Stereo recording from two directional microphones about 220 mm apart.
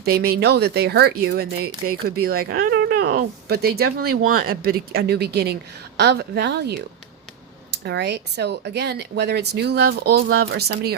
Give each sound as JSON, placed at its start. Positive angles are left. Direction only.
{"t": 0.0, "sound": "speech", "side_deg": -45}
{"t": 7.9, "sound": "speech", "side_deg": -50}